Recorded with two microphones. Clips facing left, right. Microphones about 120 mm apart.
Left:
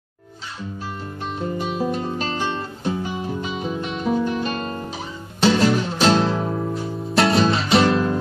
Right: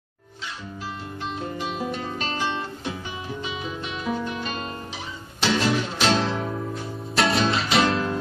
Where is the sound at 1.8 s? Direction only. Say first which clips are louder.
Left 5 dB; 40° left (ahead or behind).